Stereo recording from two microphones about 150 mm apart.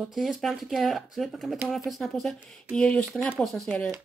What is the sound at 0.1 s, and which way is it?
Speech, centre (ahead or behind).